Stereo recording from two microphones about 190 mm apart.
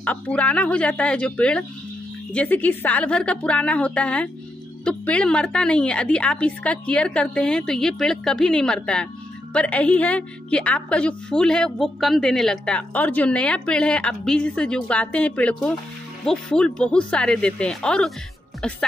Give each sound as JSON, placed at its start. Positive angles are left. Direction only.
{"t": 0.0, "sound": "a woman's voice", "side_deg": 5}